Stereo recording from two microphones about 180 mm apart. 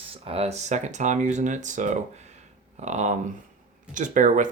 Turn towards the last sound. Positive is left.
turn(degrees=-45)  # may be behind; listen again after turning